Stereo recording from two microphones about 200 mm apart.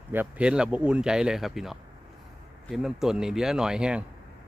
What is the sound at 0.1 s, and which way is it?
Speech, 10° right (ahead or behind).